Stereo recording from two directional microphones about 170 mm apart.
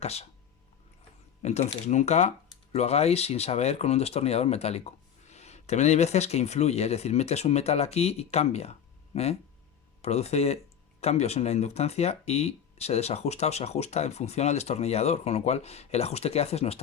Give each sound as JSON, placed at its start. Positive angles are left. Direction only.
{"t": 0.0, "sound": "speech", "side_deg": 40}
{"t": 1.4, "sound": "speech", "side_deg": 40}